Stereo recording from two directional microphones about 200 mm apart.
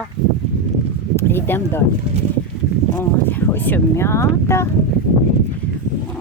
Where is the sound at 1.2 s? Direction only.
10° left (ahead or behind).